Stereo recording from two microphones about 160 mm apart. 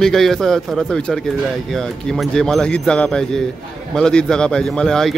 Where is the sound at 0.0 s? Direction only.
Centre (ahead or behind).